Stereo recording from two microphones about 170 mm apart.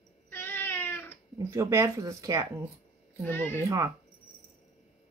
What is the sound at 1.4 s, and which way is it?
Speech, 15° right (ahead or behind).